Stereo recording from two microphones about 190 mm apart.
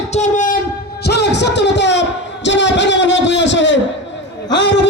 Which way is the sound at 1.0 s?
60° left (ahead or behind).